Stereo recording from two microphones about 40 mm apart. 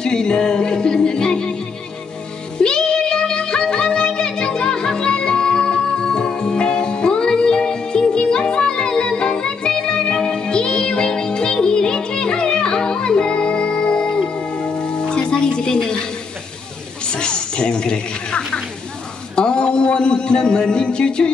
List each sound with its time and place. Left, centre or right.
0.0 s music: centre
2.6 s music: left
17.0 s a sound: left